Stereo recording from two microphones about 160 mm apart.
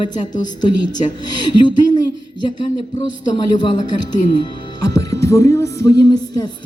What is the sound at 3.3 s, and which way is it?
Speech, 30° left (ahead or behind).